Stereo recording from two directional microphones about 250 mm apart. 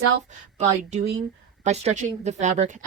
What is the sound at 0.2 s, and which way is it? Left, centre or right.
A woman's voice, right.